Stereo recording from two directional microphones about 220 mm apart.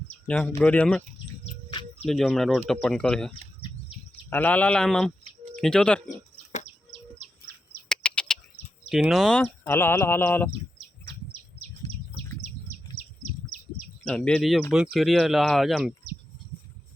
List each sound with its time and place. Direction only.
0.3 s speech: 5° left (ahead or behind)
2.0 s speech: centre (ahead or behind)
7.2 s insect: 40° right (ahead or behind)
7.9 s bird: 5° left (ahead or behind)
8.9 s speech: centre (ahead or behind)
14.0 s speech: 5° left (ahead or behind)